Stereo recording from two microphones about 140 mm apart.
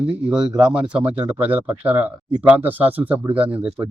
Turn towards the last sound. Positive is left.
turn(degrees=-10)  # may be behind; listen again after turning